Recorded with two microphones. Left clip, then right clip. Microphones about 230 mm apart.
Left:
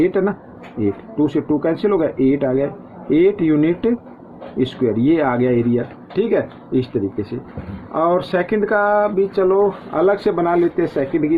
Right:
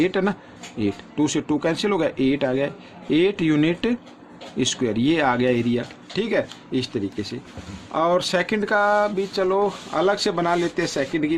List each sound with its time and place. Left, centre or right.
0.0 s speech: right